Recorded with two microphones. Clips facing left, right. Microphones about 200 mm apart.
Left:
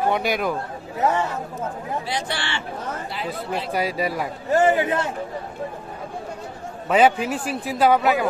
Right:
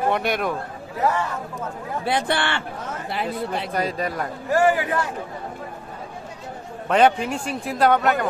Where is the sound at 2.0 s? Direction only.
55° right (ahead or behind).